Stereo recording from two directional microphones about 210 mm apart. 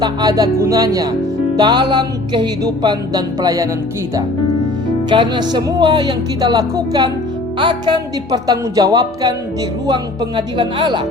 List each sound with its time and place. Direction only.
0.0 s speech: 20° right (ahead or behind)
1.5 s music: 20° right (ahead or behind)
5.0 s music: 20° right (ahead or behind)
8.4 s speech: 15° right (ahead or behind)
9.9 s music: 20° right (ahead or behind)